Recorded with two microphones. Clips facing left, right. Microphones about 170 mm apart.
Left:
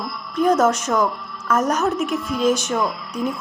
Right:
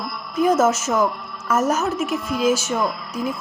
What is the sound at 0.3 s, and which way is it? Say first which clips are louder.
A woman's voice: even; 5° right (ahead or behind).